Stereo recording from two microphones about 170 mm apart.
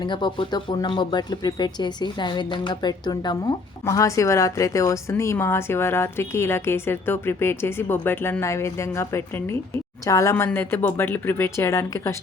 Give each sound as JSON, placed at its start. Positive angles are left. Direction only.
{"t": 0.0, "sound": "a woman's voice", "side_deg": 25}